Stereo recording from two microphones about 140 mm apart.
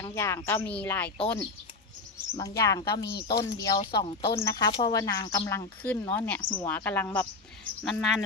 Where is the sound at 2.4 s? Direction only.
25° left (ahead or behind).